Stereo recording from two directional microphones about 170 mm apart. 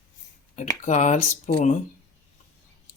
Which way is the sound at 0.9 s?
45° left (ahead or behind).